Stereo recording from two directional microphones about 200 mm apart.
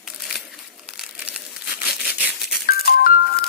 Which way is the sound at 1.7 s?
50° left (ahead or behind).